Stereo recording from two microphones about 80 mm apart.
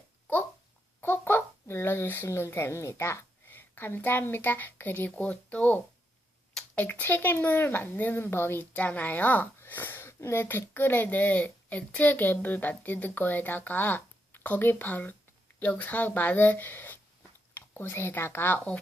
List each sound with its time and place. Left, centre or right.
1.0 s a child's voice: left